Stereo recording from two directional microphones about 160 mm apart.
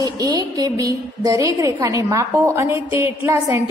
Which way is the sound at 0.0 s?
25° right (ahead or behind).